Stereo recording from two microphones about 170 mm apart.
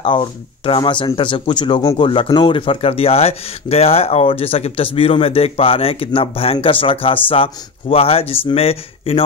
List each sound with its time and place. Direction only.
0.0 s speech: 30° left (ahead or behind)